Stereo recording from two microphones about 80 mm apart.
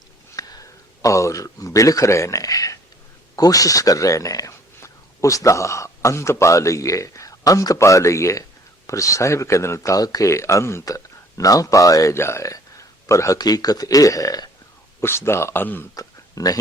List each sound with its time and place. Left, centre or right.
0.3 s speech: left
12.1 s speech: left
15.0 s speech: left
16.0 s a sound: left